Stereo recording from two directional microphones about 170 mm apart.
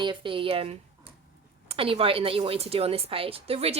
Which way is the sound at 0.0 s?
30° right (ahead or behind).